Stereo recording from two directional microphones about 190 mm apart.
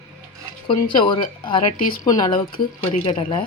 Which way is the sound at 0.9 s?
25° left (ahead or behind).